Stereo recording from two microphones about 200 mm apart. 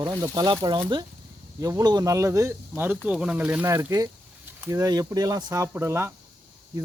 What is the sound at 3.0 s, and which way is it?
Speech, 5° right (ahead or behind).